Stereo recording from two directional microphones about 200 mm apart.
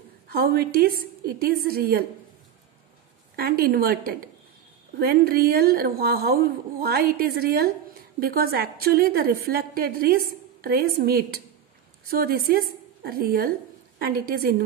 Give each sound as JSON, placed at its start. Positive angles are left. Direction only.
{"t": 0.3, "sound": "a woman's voice", "side_deg": -50}
{"t": 3.3, "sound": "a woman's voice", "side_deg": -50}